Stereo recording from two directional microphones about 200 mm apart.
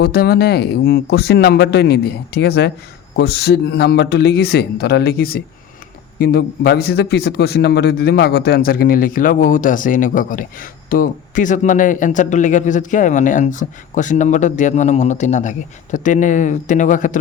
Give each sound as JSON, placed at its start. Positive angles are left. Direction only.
{"t": 0.0, "sound": "a man's voice", "side_deg": 50}